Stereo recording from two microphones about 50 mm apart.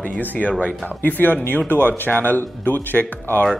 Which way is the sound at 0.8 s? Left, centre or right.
Left.